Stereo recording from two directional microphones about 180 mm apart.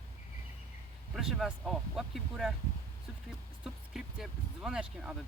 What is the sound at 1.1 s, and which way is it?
Speech, centre (ahead or behind).